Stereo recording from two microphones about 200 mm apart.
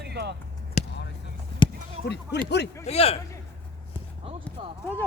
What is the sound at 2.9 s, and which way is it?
Speech, 30° left (ahead or behind).